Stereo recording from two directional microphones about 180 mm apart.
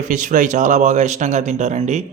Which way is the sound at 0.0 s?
45° right (ahead or behind).